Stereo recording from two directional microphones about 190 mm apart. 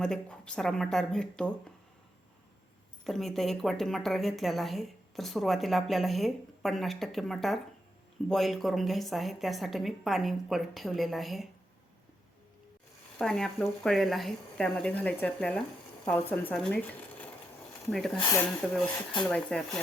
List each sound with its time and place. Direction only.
0.0 s speech: 5° left (ahead or behind)
3.0 s speech: centre (ahead or behind)
13.1 s speech: 5° left (ahead or behind)
18.2 s speech: 15° left (ahead or behind)
19.3 s speech: 5° left (ahead or behind)